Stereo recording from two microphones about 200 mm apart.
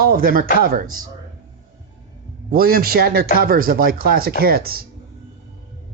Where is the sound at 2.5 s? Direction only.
50° right (ahead or behind).